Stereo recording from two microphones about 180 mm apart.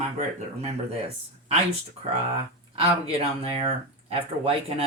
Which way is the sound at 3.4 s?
35° right (ahead or behind).